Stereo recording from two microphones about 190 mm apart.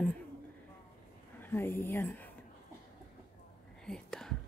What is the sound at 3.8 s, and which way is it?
Whispering, 5° left (ahead or behind).